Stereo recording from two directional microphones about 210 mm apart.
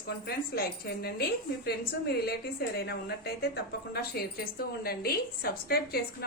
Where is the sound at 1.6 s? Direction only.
50° left (ahead or behind).